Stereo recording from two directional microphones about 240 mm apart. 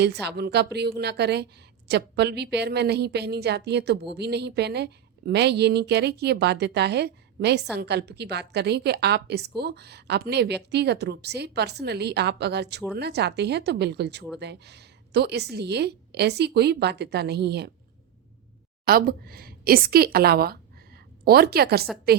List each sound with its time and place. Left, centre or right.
0.0 s a woman's voice: right
18.9 s a woman's voice: right